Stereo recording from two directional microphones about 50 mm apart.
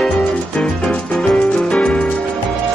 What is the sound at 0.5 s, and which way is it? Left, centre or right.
Music, centre.